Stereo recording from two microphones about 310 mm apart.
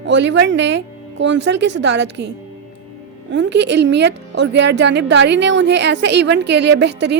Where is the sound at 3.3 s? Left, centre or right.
Right.